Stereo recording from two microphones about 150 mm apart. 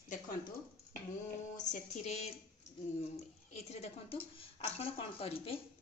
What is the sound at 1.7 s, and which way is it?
Speech, 45° left (ahead or behind).